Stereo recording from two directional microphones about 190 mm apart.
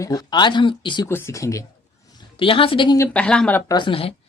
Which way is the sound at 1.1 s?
15° left (ahead or behind).